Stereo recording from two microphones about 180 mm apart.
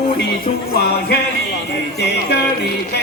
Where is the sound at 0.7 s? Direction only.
60° left (ahead or behind).